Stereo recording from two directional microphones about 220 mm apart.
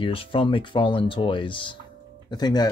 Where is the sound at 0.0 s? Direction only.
25° left (ahead or behind).